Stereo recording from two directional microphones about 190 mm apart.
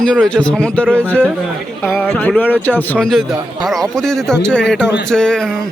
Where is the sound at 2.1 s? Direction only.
10° left (ahead or behind).